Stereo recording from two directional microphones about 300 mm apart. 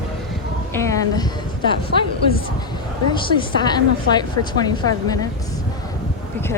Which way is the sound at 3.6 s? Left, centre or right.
Centre.